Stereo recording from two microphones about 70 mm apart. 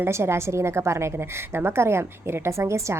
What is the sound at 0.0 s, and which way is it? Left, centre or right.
A woman's voice, right.